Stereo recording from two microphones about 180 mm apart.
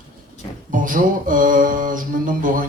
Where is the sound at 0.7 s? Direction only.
50° right (ahead or behind).